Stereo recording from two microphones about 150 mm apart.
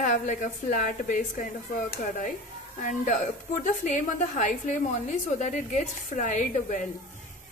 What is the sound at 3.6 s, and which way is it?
A woman's voice, 55° left (ahead or behind).